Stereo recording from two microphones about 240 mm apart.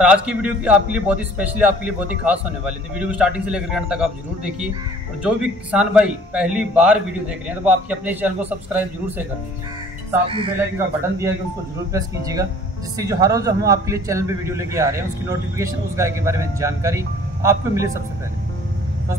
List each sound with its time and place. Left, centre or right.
0.0 s a man's voice: centre
5.2 s a man's voice: centre
10.2 s speech: right
11.9 s a man's voice: centre